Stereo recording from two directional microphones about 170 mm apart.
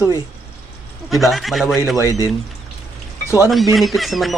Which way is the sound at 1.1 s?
Centre (ahead or behind).